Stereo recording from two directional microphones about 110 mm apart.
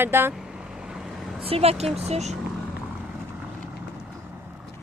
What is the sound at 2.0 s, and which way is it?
Speech, 85° right.